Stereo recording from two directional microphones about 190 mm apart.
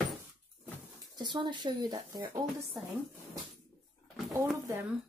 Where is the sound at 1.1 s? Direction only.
25° right (ahead or behind).